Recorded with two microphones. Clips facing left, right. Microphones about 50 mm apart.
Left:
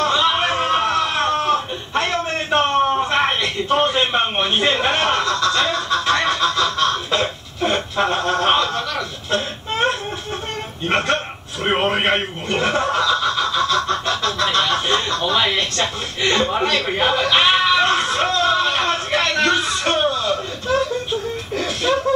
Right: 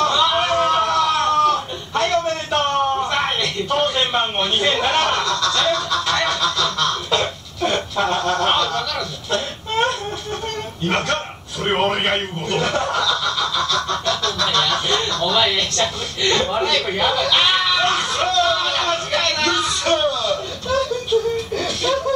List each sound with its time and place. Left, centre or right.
0.0 s a sound: left
10.8 s a man's voice: left
11.6 s chuckle: left